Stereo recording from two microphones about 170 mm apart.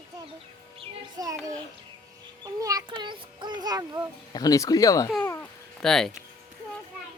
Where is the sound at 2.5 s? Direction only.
20° right (ahead or behind).